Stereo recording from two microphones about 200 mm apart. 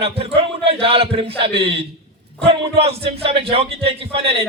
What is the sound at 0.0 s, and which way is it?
Speech, 30° right (ahead or behind).